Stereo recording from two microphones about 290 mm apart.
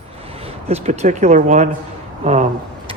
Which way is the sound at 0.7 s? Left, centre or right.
Right.